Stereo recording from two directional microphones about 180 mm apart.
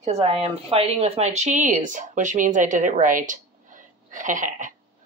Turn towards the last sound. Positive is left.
turn(degrees=-45)  # may be behind; listen again after turning